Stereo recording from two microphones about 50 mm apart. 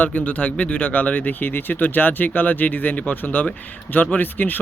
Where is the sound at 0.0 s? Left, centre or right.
Left.